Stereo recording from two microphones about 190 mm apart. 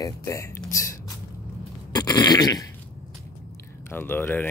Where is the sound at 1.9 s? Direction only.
20° left (ahead or behind).